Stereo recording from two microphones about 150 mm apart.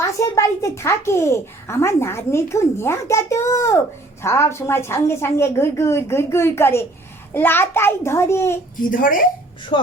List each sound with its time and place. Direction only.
0.0 s a child's voice: 20° left (ahead or behind)
8.8 s speech: 65° left (ahead or behind)
9.7 s speech: 40° left (ahead or behind)